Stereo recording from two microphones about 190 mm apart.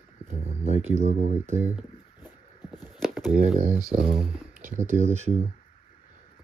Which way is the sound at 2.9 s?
Centre (ahead or behind).